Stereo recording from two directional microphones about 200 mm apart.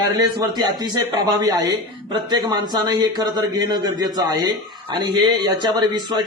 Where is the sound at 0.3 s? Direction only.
20° right (ahead or behind).